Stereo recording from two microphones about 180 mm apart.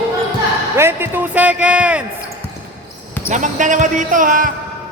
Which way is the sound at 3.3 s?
45° right (ahead or behind).